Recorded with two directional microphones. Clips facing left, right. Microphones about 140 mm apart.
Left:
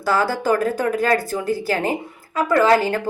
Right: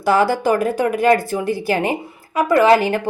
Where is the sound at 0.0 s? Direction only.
15° right (ahead or behind).